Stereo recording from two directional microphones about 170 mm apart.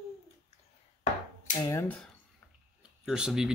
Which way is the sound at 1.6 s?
15° left (ahead or behind).